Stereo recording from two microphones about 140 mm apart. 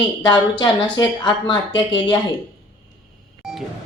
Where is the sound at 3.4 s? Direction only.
5° right (ahead or behind).